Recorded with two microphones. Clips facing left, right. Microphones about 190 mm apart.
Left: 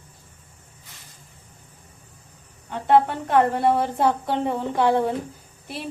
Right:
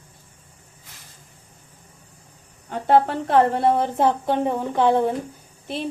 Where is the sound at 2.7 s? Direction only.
40° right (ahead or behind); by 5.0 s 20° right (ahead or behind).